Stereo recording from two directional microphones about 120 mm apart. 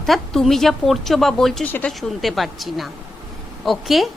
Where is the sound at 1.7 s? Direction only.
15° left (ahead or behind).